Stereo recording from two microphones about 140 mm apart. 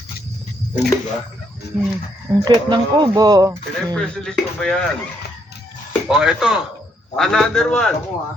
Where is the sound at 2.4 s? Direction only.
30° right (ahead or behind).